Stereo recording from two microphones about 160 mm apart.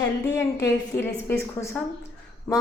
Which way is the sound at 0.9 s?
15° left (ahead or behind).